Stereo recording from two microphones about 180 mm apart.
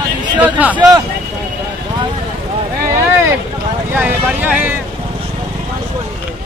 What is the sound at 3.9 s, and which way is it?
Speech, 10° right (ahead or behind).